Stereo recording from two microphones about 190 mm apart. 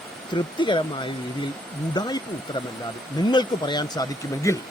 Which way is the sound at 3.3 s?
25° left (ahead or behind).